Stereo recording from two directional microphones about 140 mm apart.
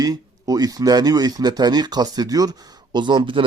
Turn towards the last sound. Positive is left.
turn(degrees=-35)  # may be behind; listen again after turning